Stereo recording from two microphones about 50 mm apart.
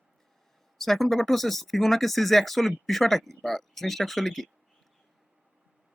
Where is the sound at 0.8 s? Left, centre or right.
Centre.